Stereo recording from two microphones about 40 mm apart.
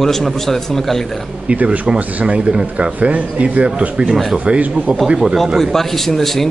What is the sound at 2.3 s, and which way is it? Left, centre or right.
Speech, right.